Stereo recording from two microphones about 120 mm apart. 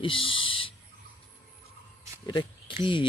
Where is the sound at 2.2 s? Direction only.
40° left (ahead or behind).